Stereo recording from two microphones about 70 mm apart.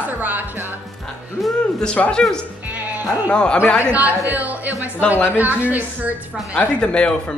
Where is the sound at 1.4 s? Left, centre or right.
Centre.